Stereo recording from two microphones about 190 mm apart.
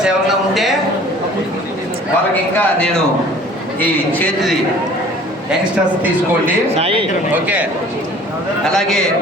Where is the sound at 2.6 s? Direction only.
5° left (ahead or behind).